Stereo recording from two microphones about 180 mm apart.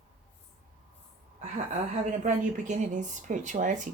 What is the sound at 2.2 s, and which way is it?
Speech, 40° right (ahead or behind).